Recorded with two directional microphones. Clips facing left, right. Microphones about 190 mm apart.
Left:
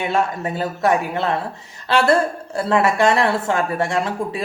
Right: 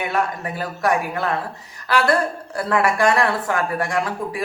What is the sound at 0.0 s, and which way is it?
Speech, 25° left (ahead or behind).